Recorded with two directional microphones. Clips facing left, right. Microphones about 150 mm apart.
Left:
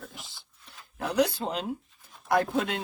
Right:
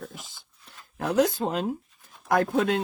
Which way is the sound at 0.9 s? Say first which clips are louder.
Right 3 dB; 50° right (ahead or behind).